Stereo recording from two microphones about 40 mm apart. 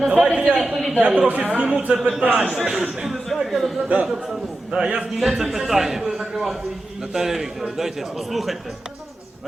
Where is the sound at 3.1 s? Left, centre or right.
Centre.